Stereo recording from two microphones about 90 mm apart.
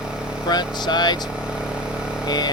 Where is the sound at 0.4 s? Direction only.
50° left (ahead or behind).